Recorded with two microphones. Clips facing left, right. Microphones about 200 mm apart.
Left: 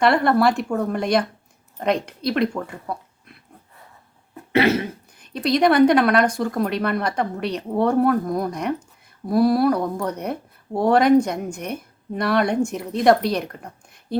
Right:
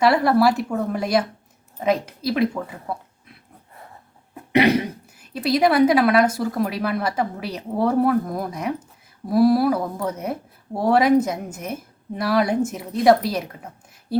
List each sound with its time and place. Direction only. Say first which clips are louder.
0.0 s speech: even; 5° right (ahead or behind)
4.5 s speech: right 1 dB; 15° right (ahead or behind)